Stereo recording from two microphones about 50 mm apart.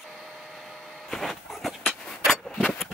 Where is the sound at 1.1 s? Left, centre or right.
Centre.